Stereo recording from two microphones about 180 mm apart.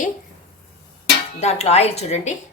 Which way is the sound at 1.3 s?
35° left (ahead or behind).